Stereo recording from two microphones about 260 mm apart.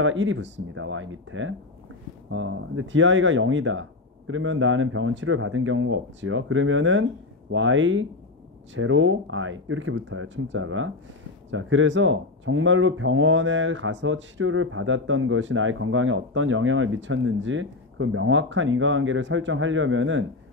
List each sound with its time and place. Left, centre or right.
0.0 s speech: right